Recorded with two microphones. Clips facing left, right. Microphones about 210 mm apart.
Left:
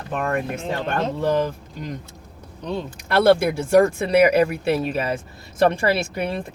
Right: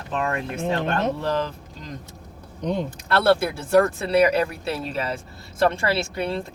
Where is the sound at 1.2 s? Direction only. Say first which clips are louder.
Left 4 dB; 10° left (ahead or behind).